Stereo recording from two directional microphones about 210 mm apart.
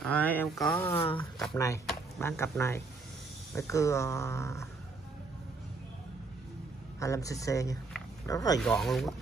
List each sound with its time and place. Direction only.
0.0 s speech: 5° left (ahead or behind)
0.9 s speech: 25° left (ahead or behind)
1.6 s speech: 15° left (ahead or behind)
7.0 s speech: 15° left (ahead or behind)
8.5 s speech: centre (ahead or behind)